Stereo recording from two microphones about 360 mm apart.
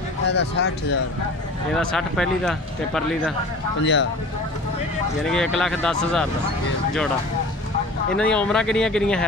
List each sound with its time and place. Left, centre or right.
0.3 s speech: left
1.8 s speech: centre
3.8 s speech: left
5.3 s speech: centre
8.2 s speech: centre